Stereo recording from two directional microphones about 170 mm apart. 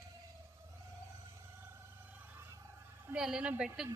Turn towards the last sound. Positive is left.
turn(degrees=-5)  # may be behind; listen again after turning